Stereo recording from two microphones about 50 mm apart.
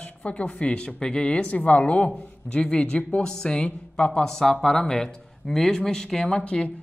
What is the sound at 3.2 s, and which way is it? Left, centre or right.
Speech, centre.